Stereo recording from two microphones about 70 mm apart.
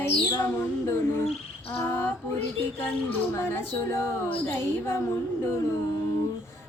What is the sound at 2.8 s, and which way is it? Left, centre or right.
Speech, left.